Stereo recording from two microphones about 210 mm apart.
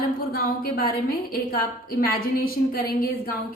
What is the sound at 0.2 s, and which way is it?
A woman's voice, 45° left (ahead or behind).